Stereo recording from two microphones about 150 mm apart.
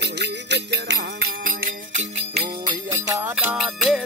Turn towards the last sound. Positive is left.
turn(degrees=-5)  # may be behind; listen again after turning